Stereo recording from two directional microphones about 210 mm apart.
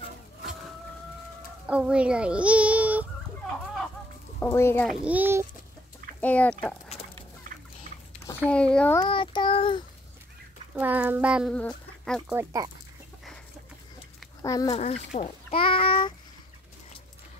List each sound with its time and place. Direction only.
1.7 s a child's voice: 5° right (ahead or behind)
4.4 s speech: 10° left (ahead or behind)
4.8 s a child's voice: 5° right (ahead or behind)
6.2 s speech: 5° left (ahead or behind)
7.5 s fowl: 40° right (ahead or behind)
8.5 s speech: 5° left (ahead or behind)
9.0 s child singing: 25° left (ahead or behind)
10.7 s speech: 10° right (ahead or behind)
12.3 s a child's voice: 15° right (ahead or behind)
14.4 s speech: 15° left (ahead or behind)
14.8 s a child's voice: 35° left (ahead or behind)